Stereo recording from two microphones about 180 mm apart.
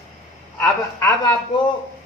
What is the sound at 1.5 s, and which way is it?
Speech, 25° left (ahead or behind).